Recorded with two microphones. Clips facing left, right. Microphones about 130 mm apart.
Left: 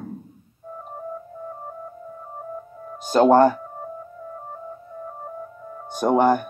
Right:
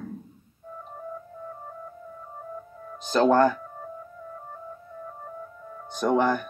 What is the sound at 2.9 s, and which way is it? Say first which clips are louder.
Music: left 5 dB; 50° left (ahead or behind).